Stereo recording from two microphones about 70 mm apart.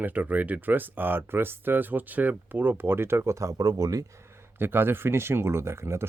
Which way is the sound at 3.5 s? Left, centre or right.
Right.